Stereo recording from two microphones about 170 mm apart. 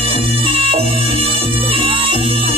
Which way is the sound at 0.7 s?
35° right (ahead or behind).